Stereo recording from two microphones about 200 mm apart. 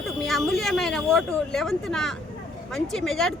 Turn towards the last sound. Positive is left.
turn(degrees=0)  # may be behind; listen again after turning